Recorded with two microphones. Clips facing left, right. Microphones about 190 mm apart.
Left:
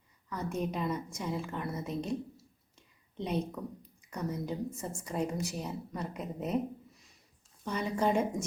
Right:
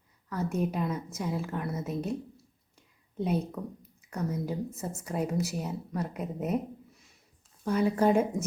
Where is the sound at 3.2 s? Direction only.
5° right (ahead or behind).